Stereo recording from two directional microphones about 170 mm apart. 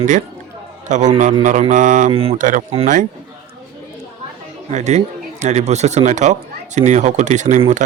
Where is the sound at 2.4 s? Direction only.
50° right (ahead or behind).